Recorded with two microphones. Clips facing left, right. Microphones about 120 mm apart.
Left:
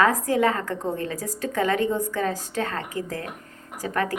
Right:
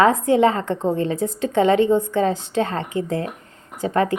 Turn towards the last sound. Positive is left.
turn(degrees=-25)  # may be behind; listen again after turning